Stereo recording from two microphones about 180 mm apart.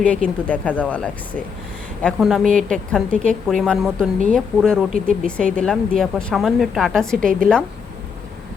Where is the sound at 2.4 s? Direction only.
45° right (ahead or behind).